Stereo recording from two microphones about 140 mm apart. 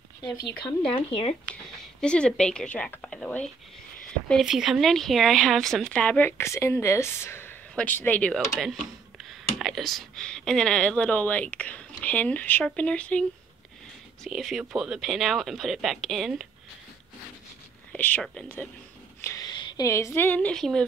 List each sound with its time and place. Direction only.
0.4 s speech: 35° left (ahead or behind)
1.5 s speech: 5° left (ahead or behind)
8.3 s speech: centre (ahead or behind)
14.2 s speech: centre (ahead or behind)
17.9 s speech: 10° left (ahead or behind)
19.2 s a sound: 25° left (ahead or behind)
19.9 s speech: 20° left (ahead or behind); by 20.8 s 5° left (ahead or behind)